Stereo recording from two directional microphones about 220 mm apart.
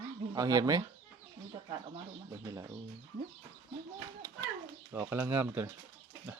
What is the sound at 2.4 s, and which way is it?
Speech, 15° right (ahead or behind).